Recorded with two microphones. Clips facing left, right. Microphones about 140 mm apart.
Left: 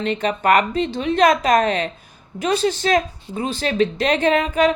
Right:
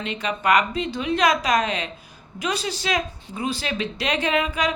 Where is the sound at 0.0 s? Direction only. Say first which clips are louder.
Left 5 dB; 40° left (ahead or behind).